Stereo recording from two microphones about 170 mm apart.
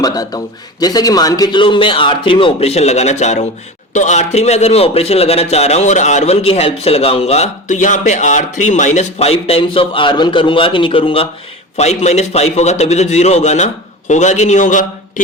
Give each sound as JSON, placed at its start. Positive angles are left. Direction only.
{"t": 0.0, "sound": "a man's voice", "side_deg": 20}